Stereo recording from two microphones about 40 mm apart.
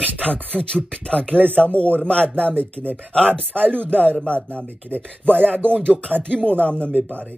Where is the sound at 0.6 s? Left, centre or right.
Centre.